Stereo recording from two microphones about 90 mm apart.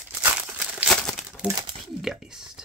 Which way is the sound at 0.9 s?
5° left (ahead or behind).